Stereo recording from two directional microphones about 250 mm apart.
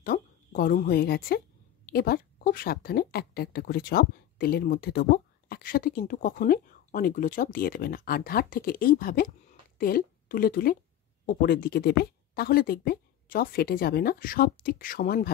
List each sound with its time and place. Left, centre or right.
0.0 s a woman's voice: left